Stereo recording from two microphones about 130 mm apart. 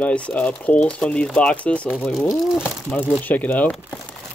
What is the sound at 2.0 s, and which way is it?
Speech, centre (ahead or behind).